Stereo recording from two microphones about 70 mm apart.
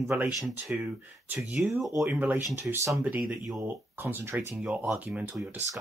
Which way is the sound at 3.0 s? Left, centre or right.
Centre.